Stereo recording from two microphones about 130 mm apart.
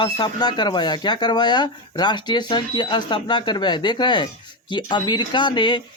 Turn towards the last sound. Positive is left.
turn(degrees=35)  # may be behind; listen again after turning